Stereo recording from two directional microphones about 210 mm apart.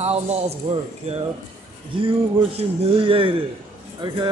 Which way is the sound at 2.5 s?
25° right (ahead or behind).